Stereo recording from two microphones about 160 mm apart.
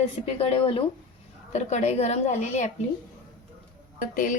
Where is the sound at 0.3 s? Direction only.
35° left (ahead or behind).